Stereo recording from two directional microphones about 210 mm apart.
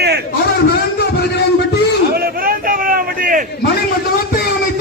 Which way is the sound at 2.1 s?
45° right (ahead or behind).